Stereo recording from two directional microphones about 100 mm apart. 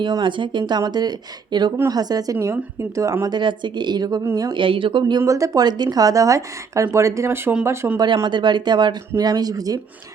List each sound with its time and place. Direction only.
0.0 s speech: 50° right (ahead or behind); by 3.3 s 35° right (ahead or behind)
3.3 s speech: 50° right (ahead or behind)
4.5 s speech: 55° right (ahead or behind)
5.2 s speech: 35° right (ahead or behind)
7.9 s speech: 45° right (ahead or behind)